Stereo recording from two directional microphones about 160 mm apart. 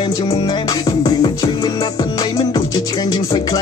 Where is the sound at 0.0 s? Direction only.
30° left (ahead or behind).